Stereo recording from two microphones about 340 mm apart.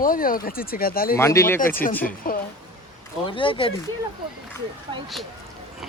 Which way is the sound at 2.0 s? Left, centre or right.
Left.